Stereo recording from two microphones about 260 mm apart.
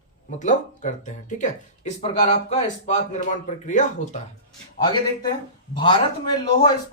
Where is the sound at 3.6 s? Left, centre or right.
Left.